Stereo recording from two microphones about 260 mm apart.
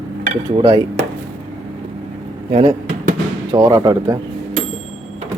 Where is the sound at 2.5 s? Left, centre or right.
Right.